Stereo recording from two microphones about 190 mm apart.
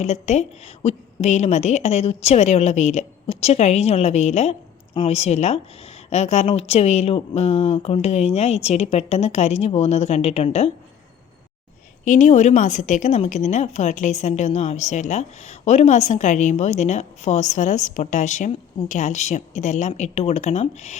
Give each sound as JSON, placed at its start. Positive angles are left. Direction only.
{"t": 0.0, "sound": "a woman's voice", "side_deg": 35}
{"t": 12.0, "sound": "a woman's voice", "side_deg": 40}